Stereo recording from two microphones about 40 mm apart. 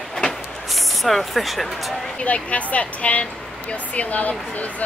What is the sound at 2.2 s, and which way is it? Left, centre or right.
Speech, left.